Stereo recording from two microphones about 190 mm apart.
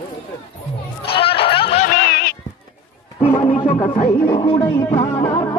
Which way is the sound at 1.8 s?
55° left (ahead or behind).